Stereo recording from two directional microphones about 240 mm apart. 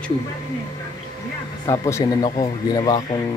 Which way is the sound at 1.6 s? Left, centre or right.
Centre.